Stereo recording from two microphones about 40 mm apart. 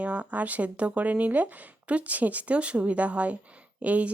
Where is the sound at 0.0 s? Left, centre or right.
Right.